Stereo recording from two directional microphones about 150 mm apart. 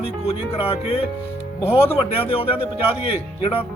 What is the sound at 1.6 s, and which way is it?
Speech, 15° left (ahead or behind).